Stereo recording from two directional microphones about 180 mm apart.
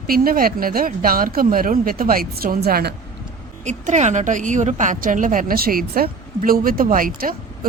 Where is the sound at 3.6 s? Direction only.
40° right (ahead or behind).